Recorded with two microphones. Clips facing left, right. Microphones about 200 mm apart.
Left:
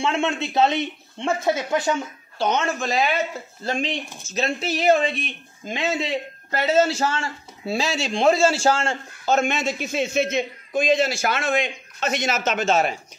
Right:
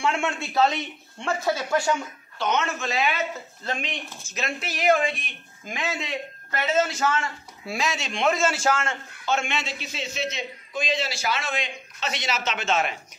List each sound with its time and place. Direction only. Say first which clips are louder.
0.0 s speech: left 3 dB; 20° left (ahead or behind)
2.3 s speech: left 3 dB; 35° left (ahead or behind)